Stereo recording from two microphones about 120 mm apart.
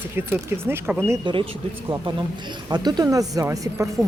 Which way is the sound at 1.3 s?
40° right (ahead or behind).